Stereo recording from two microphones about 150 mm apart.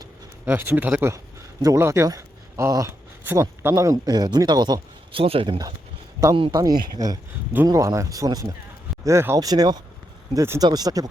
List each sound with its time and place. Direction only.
0.4 s speech: 15° right (ahead or behind)
1.6 s speech: 20° right (ahead or behind)